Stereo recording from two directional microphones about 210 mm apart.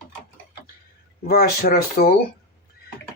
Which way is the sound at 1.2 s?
45° left (ahead or behind).